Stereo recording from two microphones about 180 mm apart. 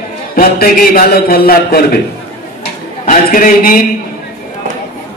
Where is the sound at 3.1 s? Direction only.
50° left (ahead or behind).